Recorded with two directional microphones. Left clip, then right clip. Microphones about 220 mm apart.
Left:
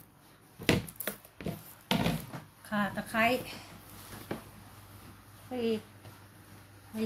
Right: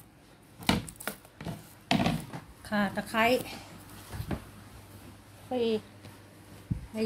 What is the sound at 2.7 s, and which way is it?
Speech, 30° right (ahead or behind).